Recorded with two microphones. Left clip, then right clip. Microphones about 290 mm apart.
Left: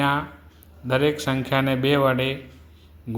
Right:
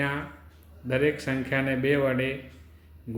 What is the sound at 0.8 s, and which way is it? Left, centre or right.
Speech, left.